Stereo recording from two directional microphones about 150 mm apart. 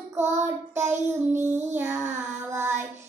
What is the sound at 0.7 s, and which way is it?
Child singing, 15° right (ahead or behind).